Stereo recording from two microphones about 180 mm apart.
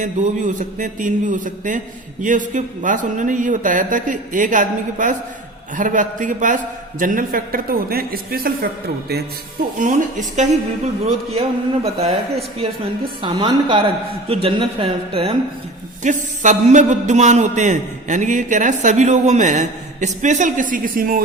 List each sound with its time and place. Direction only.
0.0 s a man's voice: 45° right (ahead or behind)
9.7 s a man's voice: 45° right (ahead or behind)
11.0 s a man's voice: 35° right (ahead or behind)
16.0 s a man's voice: 45° right (ahead or behind)